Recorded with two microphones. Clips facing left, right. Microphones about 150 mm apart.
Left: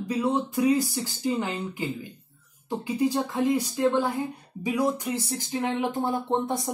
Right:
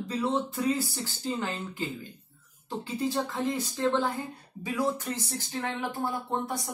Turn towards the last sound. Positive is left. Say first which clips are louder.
# left 5 dB
turn(degrees=25)  # may be behind; listen again after turning